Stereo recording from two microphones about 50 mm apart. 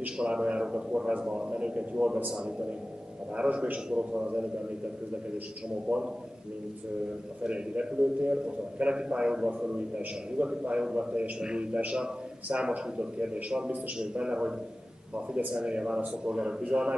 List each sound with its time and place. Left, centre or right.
0.0 s a man's voice: right
3.3 s a man's voice: right
5.9 s a man's voice: centre
7.4 s a man's voice: right